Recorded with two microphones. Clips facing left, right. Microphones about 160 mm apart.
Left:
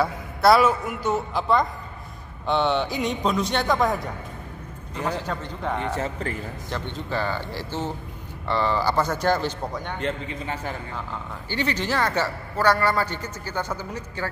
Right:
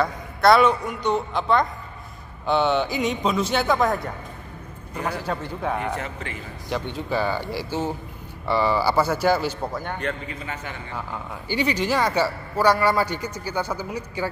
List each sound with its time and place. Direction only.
0.0 s speech: 5° left (ahead or behind)
4.9 s a man's voice: 10° right (ahead or behind)
5.9 s a man's voice: 30° left (ahead or behind)
6.7 s a man's voice: 10° right (ahead or behind)
9.9 s a man's voice: 25° left (ahead or behind)
11.4 s a man's voice: 10° right (ahead or behind)